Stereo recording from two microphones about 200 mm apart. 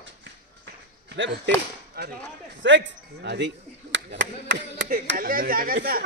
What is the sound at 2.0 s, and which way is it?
Speech, 50° right (ahead or behind).